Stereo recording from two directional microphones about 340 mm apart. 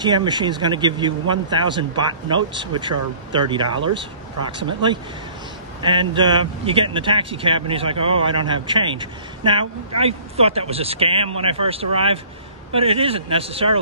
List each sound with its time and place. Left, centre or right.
0.0 s speech: centre
5.8 s speech: centre